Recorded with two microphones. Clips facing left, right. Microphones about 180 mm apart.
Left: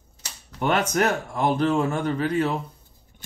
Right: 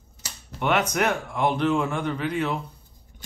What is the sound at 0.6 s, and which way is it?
A man's voice, 40° left (ahead or behind).